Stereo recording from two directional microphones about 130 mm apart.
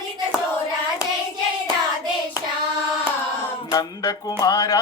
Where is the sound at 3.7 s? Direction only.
30° left (ahead or behind).